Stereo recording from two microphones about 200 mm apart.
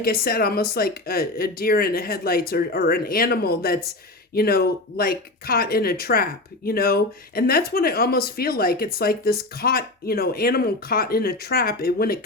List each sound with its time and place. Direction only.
0.0 s speech: 50° left (ahead or behind)